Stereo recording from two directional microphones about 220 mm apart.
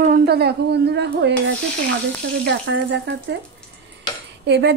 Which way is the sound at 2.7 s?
60° right (ahead or behind).